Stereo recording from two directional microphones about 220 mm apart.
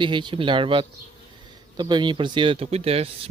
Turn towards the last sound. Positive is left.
turn(degrees=-25)  # may be behind; listen again after turning